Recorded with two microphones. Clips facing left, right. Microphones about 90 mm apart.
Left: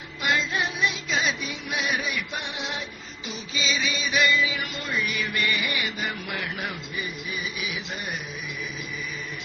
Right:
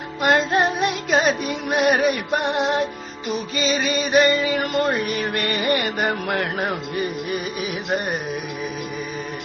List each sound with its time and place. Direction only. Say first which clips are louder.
0.2 s music: right 8 dB; 50° right (ahead or behind)